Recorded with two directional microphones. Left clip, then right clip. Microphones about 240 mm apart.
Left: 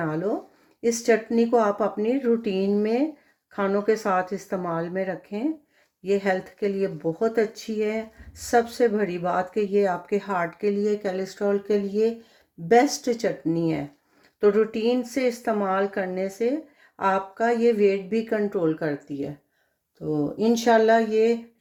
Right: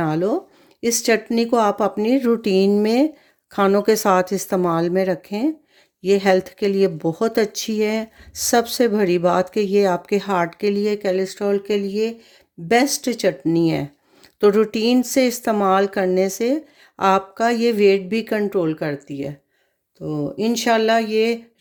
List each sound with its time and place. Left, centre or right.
0.0 s speech: right
10.8 s speech: right